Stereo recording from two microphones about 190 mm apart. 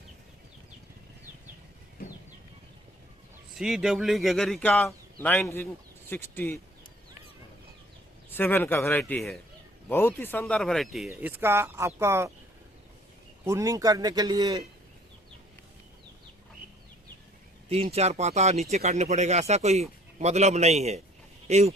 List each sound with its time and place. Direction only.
3.6 s speech: centre (ahead or behind)
8.3 s speech: 10° left (ahead or behind); by 12.3 s 15° right (ahead or behind)
13.4 s a man's voice: 15° right (ahead or behind)
17.7 s speech: 35° right (ahead or behind)